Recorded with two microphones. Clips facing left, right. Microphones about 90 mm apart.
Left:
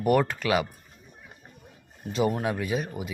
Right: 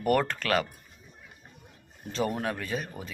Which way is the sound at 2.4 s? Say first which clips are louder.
Left 4 dB; 10° left (ahead or behind).